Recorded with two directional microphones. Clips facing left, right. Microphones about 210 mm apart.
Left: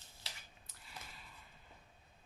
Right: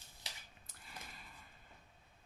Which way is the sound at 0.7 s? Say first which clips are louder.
Right 1 dB; 50° right (ahead or behind).